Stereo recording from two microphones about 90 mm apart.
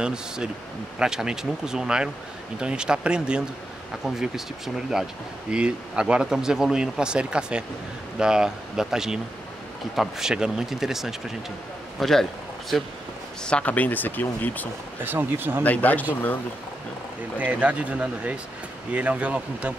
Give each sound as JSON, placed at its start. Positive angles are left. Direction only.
{"t": 0.0, "sound": "speech", "side_deg": -10}
{"t": 4.7, "sound": "a man's voice", "side_deg": -10}
{"t": 15.0, "sound": "speech", "side_deg": -25}
{"t": 15.6, "sound": "speech", "side_deg": 20}
{"t": 17.4, "sound": "speech", "side_deg": -15}